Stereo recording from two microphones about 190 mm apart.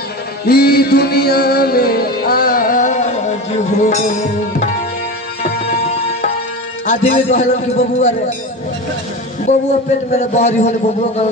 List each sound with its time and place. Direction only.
0.5 s music: 55° left (ahead or behind); by 6.3 s 35° left (ahead or behind)
6.9 s a man's voice: 35° left (ahead or behind)
9.5 s a man's voice: 35° left (ahead or behind)